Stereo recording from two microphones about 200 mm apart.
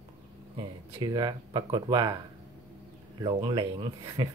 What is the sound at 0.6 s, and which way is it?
Speech, 20° right (ahead or behind).